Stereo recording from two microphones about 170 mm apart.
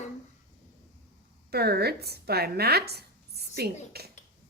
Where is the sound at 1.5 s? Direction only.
70° right (ahead or behind).